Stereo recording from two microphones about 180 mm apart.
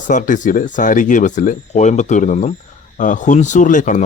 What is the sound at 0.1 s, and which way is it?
Speech, 45° left (ahead or behind).